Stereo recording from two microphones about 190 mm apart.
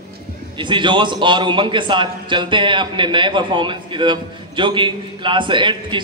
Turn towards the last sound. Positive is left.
turn(degrees=-25)  # may be behind; listen again after turning